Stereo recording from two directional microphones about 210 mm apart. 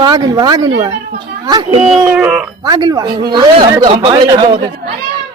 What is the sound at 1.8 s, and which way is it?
Speech, 5° right (ahead or behind).